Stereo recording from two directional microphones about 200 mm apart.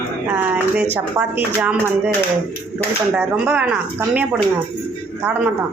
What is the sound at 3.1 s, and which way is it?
Speech, 5° right (ahead or behind).